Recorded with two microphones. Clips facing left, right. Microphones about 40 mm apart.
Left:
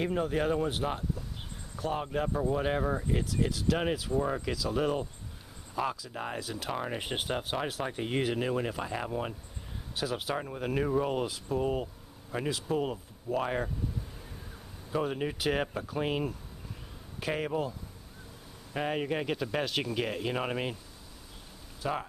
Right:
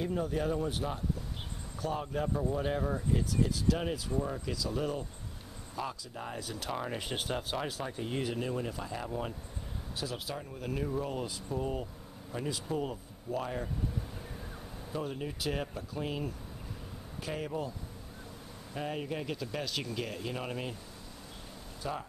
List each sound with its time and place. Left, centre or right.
0.0 s speech: left
4.6 s speech: centre
5.8 s speech: left
6.7 s speech: centre
7.0 s speech: left
7.6 s speech: left
14.9 s speech: left
18.7 s speech: left
21.8 s speech: left